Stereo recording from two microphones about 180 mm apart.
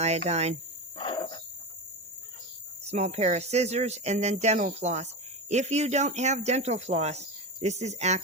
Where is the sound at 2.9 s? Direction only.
35° right (ahead or behind).